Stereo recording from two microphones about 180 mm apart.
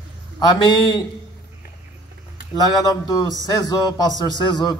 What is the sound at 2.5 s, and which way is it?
A man's voice, 20° left (ahead or behind).